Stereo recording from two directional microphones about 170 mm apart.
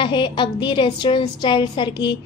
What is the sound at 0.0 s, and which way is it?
A woman's voice, 30° left (ahead or behind).